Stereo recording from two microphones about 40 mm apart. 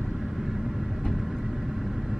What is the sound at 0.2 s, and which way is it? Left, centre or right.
Vehicle, centre.